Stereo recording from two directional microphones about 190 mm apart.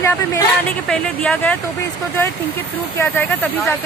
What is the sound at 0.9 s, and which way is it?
Speech, 5° left (ahead or behind).